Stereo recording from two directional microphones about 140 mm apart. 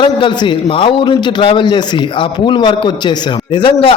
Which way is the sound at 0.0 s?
35° left (ahead or behind).